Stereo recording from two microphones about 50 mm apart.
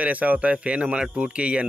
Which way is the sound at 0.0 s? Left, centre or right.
Right.